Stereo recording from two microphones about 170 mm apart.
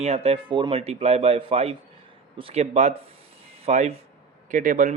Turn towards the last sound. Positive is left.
turn(degrees=-50)  # may be behind; listen again after turning